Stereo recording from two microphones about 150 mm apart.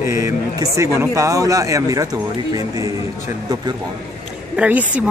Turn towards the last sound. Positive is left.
turn(degrees=-10)  # may be behind; listen again after turning